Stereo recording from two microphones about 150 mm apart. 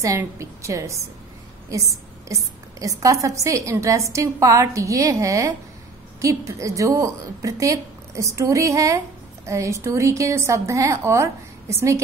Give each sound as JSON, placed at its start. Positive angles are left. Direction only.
{"t": 0.0, "sound": "a woman's voice", "side_deg": -20}